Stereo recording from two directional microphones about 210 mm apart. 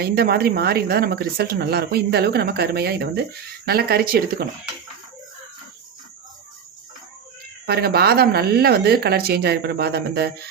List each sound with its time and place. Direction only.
0.0 s speech: 50° right (ahead or behind)
7.7 s speech: 50° right (ahead or behind)